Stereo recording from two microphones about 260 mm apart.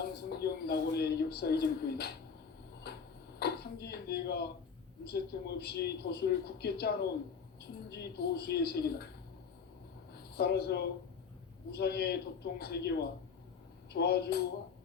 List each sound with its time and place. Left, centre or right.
0.3 s a man's voice: left
2.8 s tick-tock: left
3.3 s a man's voice: left
10.3 s a man's voice: left